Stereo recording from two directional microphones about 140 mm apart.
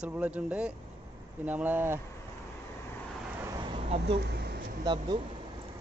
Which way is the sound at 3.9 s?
45° right (ahead or behind).